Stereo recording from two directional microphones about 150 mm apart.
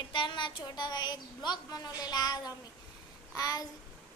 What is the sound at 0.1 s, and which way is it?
A child's voice, 35° left (ahead or behind).